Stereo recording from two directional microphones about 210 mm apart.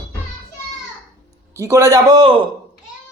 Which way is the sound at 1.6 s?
15° right (ahead or behind).